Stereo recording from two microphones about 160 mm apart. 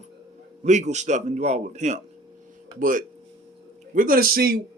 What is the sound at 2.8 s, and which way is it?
A man's voice, 60° right (ahead or behind).